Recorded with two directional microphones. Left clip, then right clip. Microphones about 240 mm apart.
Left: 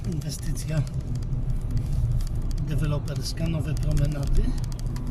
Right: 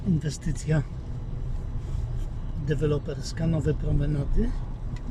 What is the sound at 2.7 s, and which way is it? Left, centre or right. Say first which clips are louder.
Speech: right 7 dB; right.